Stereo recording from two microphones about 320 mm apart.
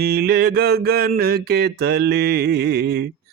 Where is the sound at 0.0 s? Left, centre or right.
Right.